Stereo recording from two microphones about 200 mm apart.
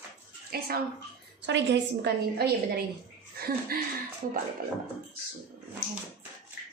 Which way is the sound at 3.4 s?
50° right (ahead or behind).